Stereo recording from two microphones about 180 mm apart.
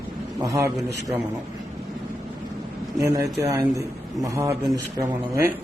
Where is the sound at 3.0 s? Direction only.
20° right (ahead or behind).